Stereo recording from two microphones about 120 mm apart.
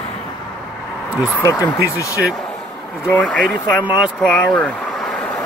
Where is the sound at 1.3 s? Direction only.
25° left (ahead or behind).